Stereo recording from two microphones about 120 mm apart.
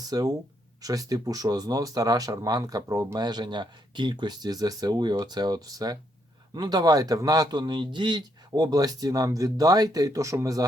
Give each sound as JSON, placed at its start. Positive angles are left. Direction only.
{"t": 0.1, "sound": "speech", "side_deg": -30}